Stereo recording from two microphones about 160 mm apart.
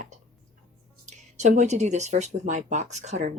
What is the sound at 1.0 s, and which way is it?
Speech, 50° right (ahead or behind).